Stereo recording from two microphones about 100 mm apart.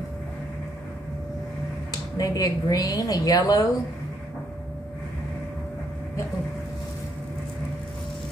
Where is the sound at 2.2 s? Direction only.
40° left (ahead or behind).